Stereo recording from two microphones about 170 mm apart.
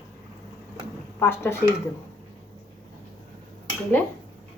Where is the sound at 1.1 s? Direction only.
15° left (ahead or behind).